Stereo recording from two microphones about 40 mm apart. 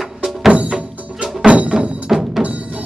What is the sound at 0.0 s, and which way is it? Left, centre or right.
Music, centre.